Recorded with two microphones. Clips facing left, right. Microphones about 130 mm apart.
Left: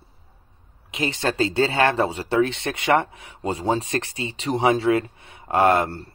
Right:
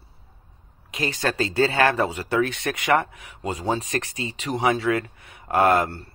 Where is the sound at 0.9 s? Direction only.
25° left (ahead or behind).